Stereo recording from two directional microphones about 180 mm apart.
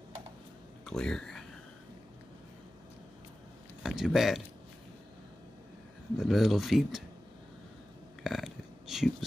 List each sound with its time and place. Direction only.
0.8 s speech: 5° left (ahead or behind)
3.8 s speech: centre (ahead or behind)
6.1 s speech: centre (ahead or behind)
8.2 s burping: centre (ahead or behind)